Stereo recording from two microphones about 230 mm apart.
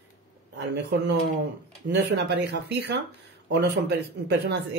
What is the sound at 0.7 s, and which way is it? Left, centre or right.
Speech, right.